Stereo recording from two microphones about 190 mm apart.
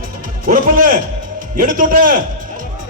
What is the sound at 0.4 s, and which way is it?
A man's voice, 45° right (ahead or behind).